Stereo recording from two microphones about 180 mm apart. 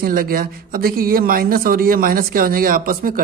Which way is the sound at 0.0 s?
55° right (ahead or behind).